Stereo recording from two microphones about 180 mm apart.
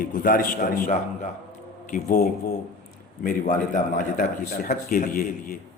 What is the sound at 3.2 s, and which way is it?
A man's voice, 50° left (ahead or behind).